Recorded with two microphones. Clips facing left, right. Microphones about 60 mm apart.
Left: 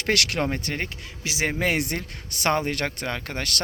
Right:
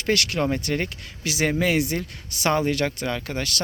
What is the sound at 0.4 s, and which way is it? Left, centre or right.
Speech, left.